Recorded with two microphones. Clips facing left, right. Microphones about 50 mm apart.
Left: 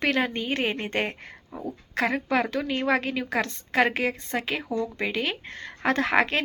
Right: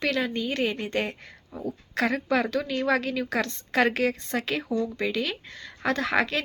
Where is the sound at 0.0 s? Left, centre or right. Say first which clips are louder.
Left 1 dB; left.